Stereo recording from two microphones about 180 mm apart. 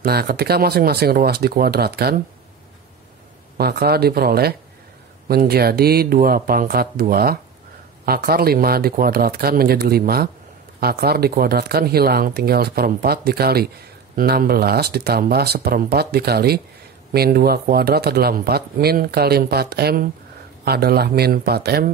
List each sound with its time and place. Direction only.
0.0 s speech: 60° right (ahead or behind)
3.5 s speech: 60° right (ahead or behind)